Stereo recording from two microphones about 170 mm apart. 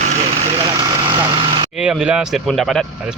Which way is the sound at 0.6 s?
25° right (ahead or behind).